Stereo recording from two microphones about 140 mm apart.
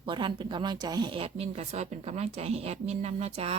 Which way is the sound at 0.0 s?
35° right (ahead or behind).